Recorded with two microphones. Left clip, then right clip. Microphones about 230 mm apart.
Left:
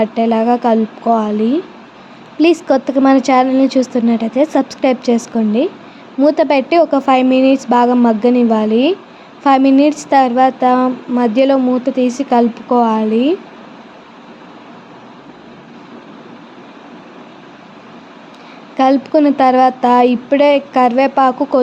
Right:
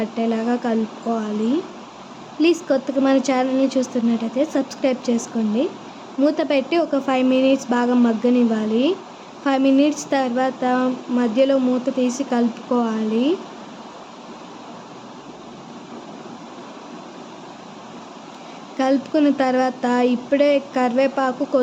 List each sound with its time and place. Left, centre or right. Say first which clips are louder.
0.0 s a woman's voice: left 9 dB; centre
18.8 s speech: left 8 dB; centre